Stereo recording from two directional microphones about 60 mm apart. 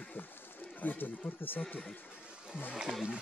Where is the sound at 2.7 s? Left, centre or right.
Centre.